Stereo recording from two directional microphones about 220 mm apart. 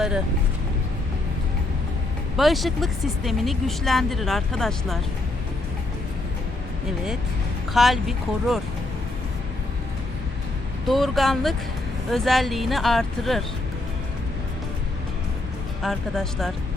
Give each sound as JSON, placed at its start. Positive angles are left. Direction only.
{"t": 2.3, "sound": "speech", "side_deg": 0}
{"t": 7.7, "sound": "speech", "side_deg": 0}
{"t": 10.8, "sound": "speech", "side_deg": 0}
{"t": 15.8, "sound": "speech", "side_deg": 0}